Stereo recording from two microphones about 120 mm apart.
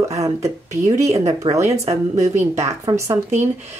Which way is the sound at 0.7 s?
70° right (ahead or behind).